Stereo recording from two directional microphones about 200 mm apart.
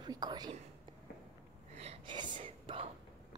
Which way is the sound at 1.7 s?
30° right (ahead or behind).